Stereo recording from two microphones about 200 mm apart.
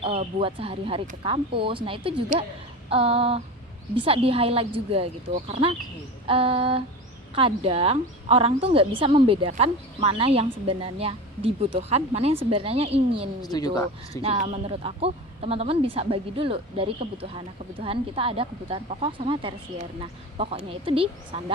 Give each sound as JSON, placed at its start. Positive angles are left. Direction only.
{"t": 0.0, "sound": "a woman's voice", "side_deg": -25}
{"t": 13.4, "sound": "speech", "side_deg": 20}
{"t": 14.2, "sound": "a woman's voice", "side_deg": -30}